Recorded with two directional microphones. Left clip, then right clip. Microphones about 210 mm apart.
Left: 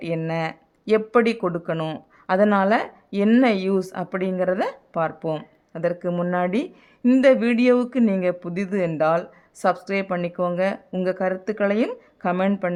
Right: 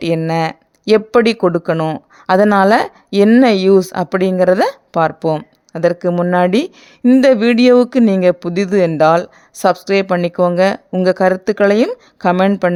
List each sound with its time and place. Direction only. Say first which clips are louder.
0.0 s speech: right 10 dB; 40° right (ahead or behind)